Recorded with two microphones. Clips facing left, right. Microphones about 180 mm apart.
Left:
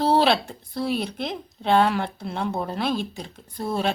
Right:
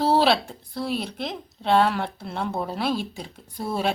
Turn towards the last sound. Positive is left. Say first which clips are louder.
# left 1 dB
turn(degrees=-5)  # may be behind; listen again after turning